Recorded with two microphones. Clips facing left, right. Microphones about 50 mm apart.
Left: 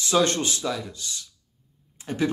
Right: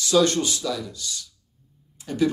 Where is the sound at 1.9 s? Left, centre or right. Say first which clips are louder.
Right 3 dB; left.